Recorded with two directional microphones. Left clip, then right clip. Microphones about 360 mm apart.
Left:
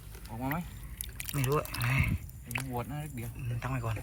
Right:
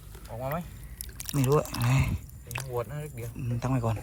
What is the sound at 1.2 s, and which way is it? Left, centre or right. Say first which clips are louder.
Speech: right 6 dB; centre.